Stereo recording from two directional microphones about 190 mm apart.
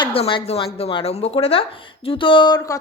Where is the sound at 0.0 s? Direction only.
30° left (ahead or behind).